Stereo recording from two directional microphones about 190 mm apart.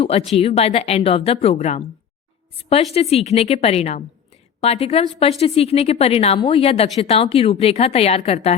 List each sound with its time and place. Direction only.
0.0 s speech: 30° left (ahead or behind)